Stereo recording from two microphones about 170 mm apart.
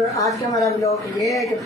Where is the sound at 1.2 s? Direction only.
Centre (ahead or behind).